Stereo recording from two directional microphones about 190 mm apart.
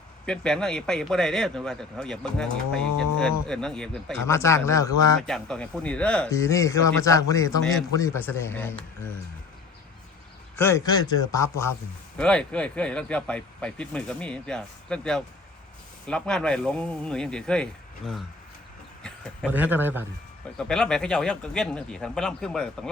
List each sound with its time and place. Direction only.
0.3 s a man's voice: 5° left (ahead or behind)
4.3 s speech: 15° left (ahead or behind)
5.2 s speech: 5° left (ahead or behind)
10.6 s speech: 15° left (ahead or behind)
12.1 s a man's voice: 5° left (ahead or behind)
19.5 s speech: 10° right (ahead or behind)
20.6 s a man's voice: 5° left (ahead or behind)